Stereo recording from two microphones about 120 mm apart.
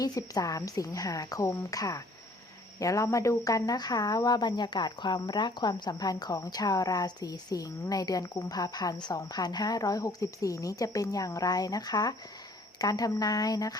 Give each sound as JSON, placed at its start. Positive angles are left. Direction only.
{"t": 0.0, "sound": "a woman's voice", "side_deg": 30}